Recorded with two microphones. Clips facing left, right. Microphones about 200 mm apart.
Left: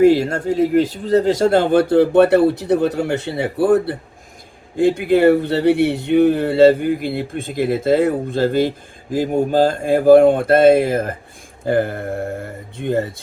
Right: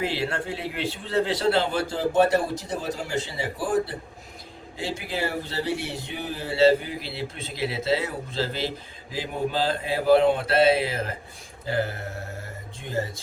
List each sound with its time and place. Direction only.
0.0 s a man's voice: 45° left (ahead or behind)